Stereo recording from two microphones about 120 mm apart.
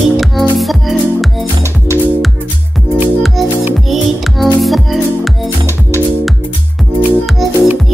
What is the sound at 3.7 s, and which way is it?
Music, centre (ahead or behind).